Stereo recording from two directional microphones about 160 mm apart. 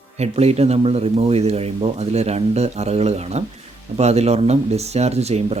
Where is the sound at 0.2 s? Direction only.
40° right (ahead or behind).